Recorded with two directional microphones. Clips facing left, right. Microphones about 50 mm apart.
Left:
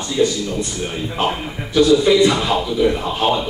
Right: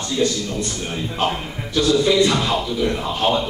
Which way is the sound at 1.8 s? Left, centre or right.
Centre.